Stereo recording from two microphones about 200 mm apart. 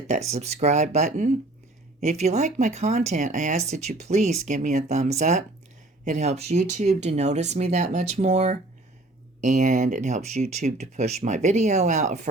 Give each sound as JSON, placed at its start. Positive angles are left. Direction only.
{"t": 0.1, "sound": "speech", "side_deg": -35}